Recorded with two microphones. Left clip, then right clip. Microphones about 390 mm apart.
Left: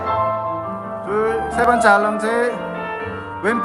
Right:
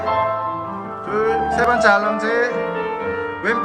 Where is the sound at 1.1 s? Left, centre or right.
Centre.